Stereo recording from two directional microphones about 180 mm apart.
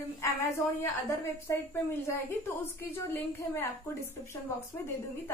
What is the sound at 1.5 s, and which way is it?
A woman's voice, 15° left (ahead or behind).